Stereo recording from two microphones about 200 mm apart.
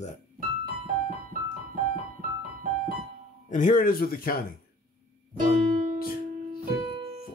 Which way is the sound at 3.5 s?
40° left (ahead or behind).